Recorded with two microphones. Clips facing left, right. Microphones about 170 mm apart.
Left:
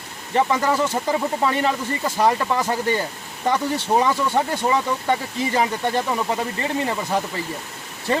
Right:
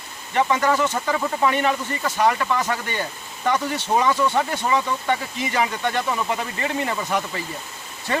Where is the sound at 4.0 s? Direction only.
35° left (ahead or behind).